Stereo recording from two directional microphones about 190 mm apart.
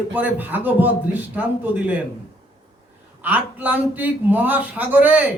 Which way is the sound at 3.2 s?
10° right (ahead or behind).